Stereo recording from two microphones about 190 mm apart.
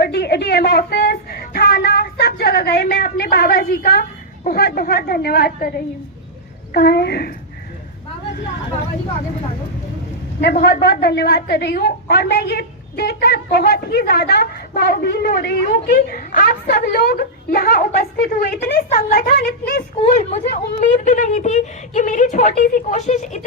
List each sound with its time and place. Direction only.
0.0 s a woman's voice: 60° left (ahead or behind)
10.4 s a woman's voice: 55° left (ahead or behind)
20.0 s a woman's voice: 35° left (ahead or behind)